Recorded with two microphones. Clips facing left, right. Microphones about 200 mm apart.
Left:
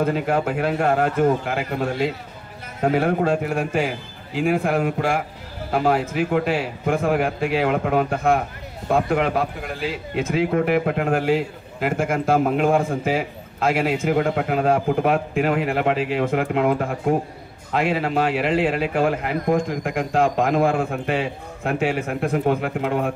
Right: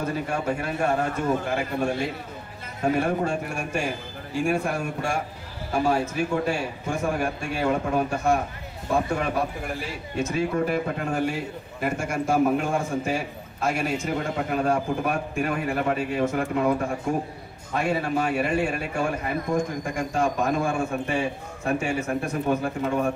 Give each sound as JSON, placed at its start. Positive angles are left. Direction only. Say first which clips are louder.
{"t": 0.0, "sound": "a man's voice", "louder": "left 6 dB", "side_deg": 90}
{"t": 2.8, "sound": "a man's voice", "louder": "left 4 dB", "side_deg": 65}
{"t": 5.7, "sound": "a man's voice", "louder": "left 3 dB", "side_deg": 60}
{"t": 8.9, "sound": "a man's voice", "louder": "left 4 dB", "side_deg": 85}
{"t": 13.9, "sound": "a man's voice", "louder": "left 6 dB", "side_deg": 60}
{"t": 17.7, "sound": "a man's voice", "louder": "left 4 dB", "side_deg": 85}